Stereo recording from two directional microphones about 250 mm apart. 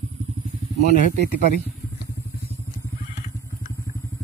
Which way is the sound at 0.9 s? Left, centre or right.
Right.